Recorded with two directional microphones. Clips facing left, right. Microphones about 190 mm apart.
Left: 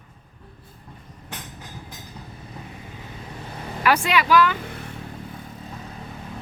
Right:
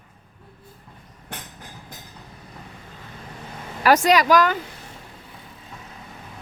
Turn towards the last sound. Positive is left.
turn(degrees=60)  # may be behind; listen again after turning